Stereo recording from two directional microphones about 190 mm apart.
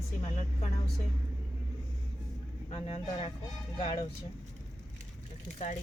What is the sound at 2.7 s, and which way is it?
Speech, 35° left (ahead or behind).